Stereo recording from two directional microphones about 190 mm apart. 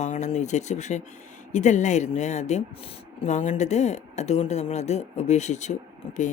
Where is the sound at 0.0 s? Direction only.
40° left (ahead or behind).